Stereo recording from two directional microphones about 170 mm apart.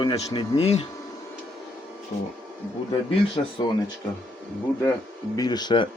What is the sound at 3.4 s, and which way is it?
Speech, 35° left (ahead or behind).